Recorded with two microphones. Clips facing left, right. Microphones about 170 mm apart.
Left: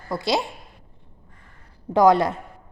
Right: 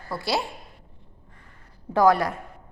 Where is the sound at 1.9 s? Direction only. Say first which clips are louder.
Left 3 dB; 20° left (ahead or behind).